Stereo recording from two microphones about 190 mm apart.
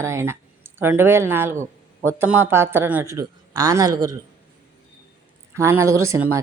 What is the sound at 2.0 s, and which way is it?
Speech, 10° right (ahead or behind).